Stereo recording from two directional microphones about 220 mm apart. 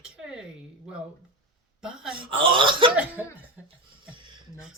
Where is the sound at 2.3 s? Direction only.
25° right (ahead or behind).